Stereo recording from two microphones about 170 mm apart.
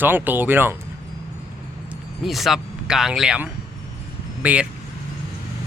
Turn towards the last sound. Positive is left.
turn(degrees=-10)  # may be behind; listen again after turning